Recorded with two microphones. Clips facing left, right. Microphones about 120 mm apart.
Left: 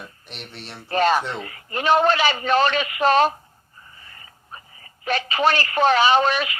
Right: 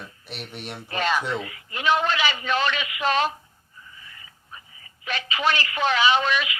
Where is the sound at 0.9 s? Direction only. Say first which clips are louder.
Left 6 dB; 40° left (ahead or behind).